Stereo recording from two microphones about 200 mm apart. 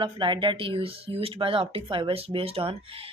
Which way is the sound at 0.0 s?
25° right (ahead or behind).